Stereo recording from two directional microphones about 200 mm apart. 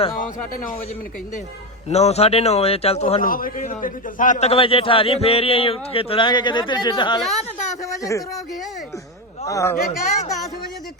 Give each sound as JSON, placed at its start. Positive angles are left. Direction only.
{"t": 0.2, "sound": "speech", "side_deg": 40}
{"t": 1.9, "sound": "speech", "side_deg": 30}
{"t": 3.2, "sound": "a man's voice", "side_deg": 45}
{"t": 7.2, "sound": "a woman's voice", "side_deg": 0}
{"t": 7.9, "sound": "speech", "side_deg": 15}
{"t": 9.5, "sound": "speech", "side_deg": 15}